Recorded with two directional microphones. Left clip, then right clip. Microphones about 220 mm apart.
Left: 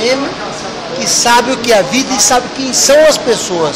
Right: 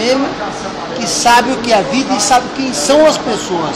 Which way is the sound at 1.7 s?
35° left (ahead or behind).